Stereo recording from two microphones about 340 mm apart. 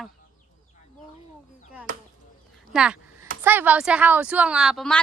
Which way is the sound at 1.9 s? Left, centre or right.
Right.